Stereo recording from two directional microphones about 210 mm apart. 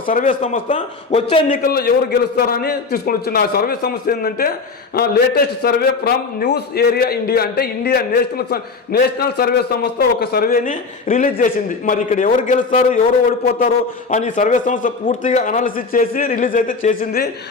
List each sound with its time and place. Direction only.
0.0 s a man's voice: 40° left (ahead or behind)
1.5 s a man's voice: 45° left (ahead or behind)
14.1 s a man's voice: 35° left (ahead or behind)